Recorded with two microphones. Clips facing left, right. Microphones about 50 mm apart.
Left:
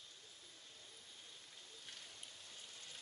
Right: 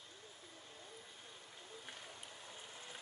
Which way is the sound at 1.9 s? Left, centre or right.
Right.